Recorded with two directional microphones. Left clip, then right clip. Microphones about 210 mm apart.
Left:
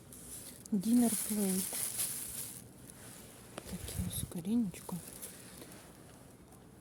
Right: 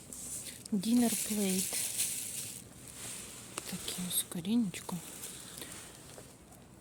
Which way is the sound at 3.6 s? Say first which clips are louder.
Right 5 dB; 5° left (ahead or behind).